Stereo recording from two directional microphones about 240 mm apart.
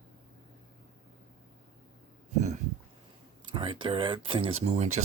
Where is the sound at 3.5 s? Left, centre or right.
Right.